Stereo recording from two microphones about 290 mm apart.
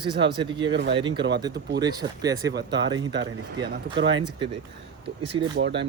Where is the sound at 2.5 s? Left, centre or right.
Right.